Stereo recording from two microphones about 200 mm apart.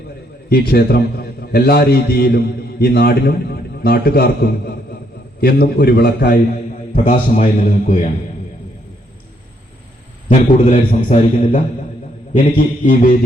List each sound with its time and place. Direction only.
0.5 s a man's voice: 50° left (ahead or behind)
10.2 s a man's voice: 35° left (ahead or behind)